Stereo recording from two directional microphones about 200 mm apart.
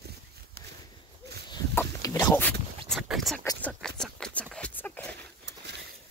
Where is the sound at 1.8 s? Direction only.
15° left (ahead or behind).